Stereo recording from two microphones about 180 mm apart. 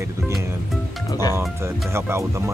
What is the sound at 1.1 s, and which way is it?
Speech, 20° left (ahead or behind).